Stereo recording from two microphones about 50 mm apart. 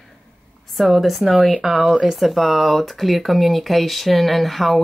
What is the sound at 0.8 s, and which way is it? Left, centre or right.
Speech, centre.